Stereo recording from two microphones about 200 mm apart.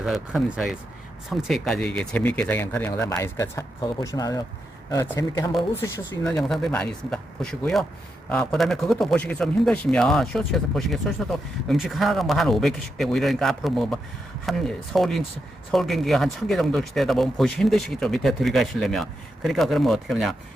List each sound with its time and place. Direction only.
0.0 s a man's voice: centre (ahead or behind)